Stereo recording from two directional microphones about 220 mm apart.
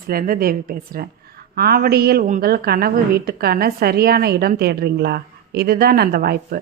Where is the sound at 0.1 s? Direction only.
40° right (ahead or behind).